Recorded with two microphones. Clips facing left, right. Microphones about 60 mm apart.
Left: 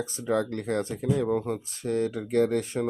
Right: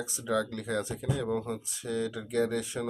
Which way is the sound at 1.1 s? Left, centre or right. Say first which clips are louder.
Left 5 dB; left.